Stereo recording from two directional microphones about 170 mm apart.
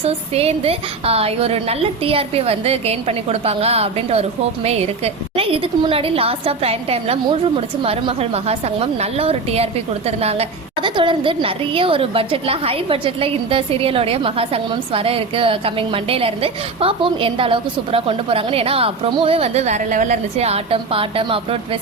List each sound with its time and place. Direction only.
0.0 s a woman's voice: 35° right (ahead or behind)